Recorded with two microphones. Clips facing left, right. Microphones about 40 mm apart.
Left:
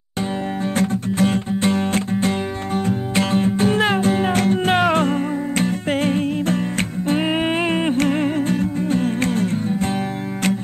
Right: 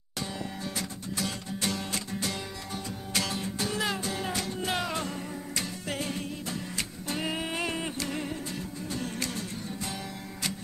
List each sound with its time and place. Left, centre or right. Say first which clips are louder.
0.7 s music: left 18 dB; left